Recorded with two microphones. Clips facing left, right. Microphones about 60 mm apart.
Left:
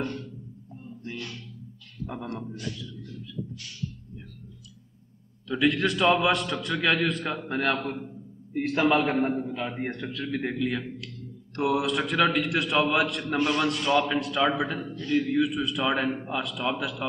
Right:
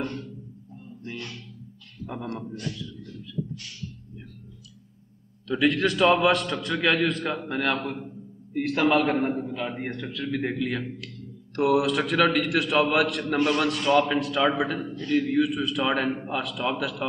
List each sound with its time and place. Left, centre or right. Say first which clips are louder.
0.0 s music: even; right
2.0 s a man's voice: right 2 dB; centre
5.5 s a man's voice: right 1 dB; centre
7.7 s a man's voice: right 1 dB; centre
8.5 s a man's voice: right 1 dB; centre